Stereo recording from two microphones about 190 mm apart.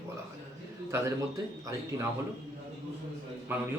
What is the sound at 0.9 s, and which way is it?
Speech, 15° right (ahead or behind).